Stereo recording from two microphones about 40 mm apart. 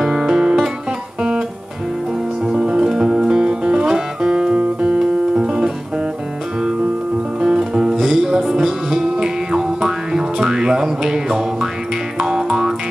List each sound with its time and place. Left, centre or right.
0.0 s music: centre
0.3 s music: centre
2.4 s music: right
7.3 s music: centre
8.2 s music: right